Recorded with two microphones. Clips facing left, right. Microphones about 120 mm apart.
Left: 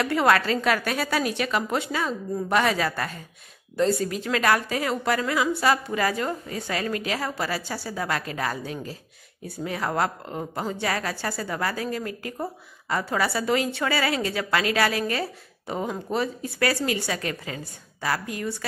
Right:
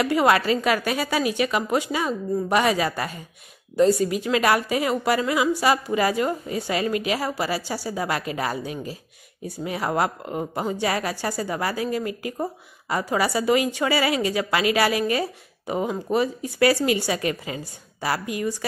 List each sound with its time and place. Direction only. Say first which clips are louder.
0.0 s a woman's voice: right 2 dB; 5° right (ahead or behind)
7.7 s speech: right 4 dB; 25° right (ahead or behind)
8.0 s a woman's voice: right 1 dB; 15° right (ahead or behind)
16.5 s a woman's voice: right 6 dB; 20° right (ahead or behind)